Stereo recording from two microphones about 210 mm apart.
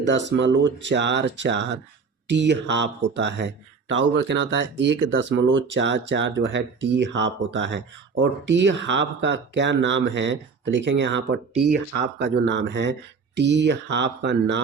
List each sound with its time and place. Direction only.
0.0 s speech: 55° right (ahead or behind)